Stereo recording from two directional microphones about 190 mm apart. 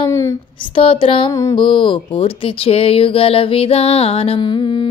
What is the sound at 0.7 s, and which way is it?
Speech, 25° left (ahead or behind).